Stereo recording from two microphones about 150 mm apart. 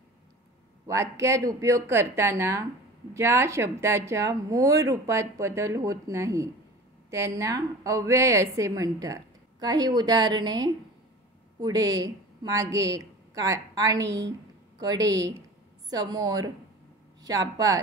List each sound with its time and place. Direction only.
0.8 s a woman's voice: 20° right (ahead or behind)